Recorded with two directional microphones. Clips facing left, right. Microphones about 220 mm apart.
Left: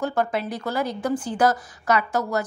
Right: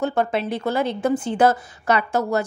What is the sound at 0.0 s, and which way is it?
A woman's voice, 25° right (ahead or behind).